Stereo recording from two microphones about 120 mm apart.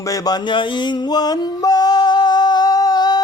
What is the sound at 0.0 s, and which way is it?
Mantra, 30° left (ahead or behind).